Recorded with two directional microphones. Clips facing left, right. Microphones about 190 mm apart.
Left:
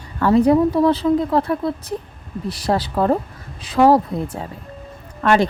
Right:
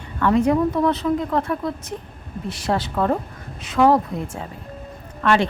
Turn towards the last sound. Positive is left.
turn(degrees=40)  # may be behind; listen again after turning